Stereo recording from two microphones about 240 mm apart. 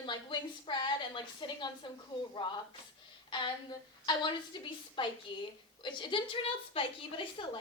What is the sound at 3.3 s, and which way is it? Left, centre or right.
A woman's voice, centre.